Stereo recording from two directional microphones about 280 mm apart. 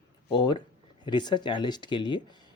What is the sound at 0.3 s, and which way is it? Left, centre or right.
Speech, centre.